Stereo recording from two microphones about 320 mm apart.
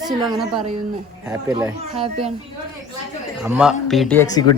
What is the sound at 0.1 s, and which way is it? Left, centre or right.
A child's voice, centre.